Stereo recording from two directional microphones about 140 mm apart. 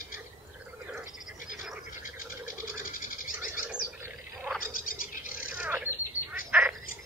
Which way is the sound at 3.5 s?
5° right (ahead or behind).